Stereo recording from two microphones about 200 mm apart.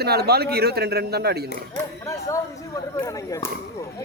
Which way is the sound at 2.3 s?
15° left (ahead or behind).